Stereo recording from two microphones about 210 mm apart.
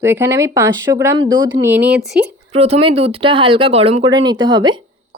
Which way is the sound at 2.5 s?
30° right (ahead or behind).